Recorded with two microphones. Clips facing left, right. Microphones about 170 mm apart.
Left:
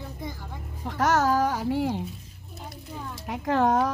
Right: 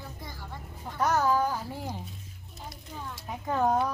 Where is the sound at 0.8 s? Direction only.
90° left.